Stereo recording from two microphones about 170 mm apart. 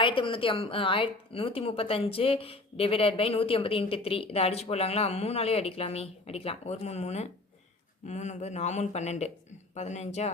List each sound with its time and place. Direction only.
0.0 s a woman's voice: 30° left (ahead or behind)